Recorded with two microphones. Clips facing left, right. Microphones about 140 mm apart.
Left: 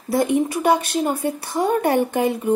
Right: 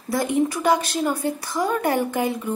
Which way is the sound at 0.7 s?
30° left (ahead or behind).